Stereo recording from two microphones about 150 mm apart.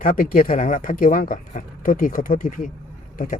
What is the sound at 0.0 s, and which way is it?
Speech, 65° left (ahead or behind).